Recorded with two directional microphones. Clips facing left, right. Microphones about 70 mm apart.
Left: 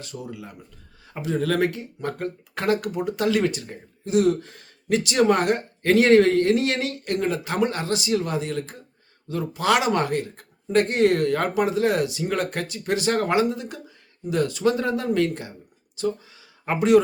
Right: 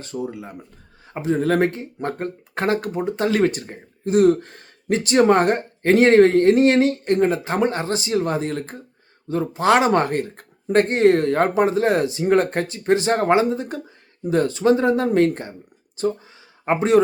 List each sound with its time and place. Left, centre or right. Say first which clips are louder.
0.0 s speech: right 7 dB; right